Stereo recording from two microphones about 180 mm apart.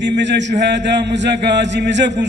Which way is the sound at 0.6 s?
75° right (ahead or behind).